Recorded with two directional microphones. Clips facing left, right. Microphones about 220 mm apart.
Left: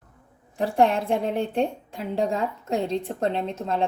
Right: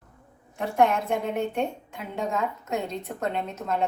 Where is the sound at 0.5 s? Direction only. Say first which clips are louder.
Left 2 dB; 35° left (ahead or behind).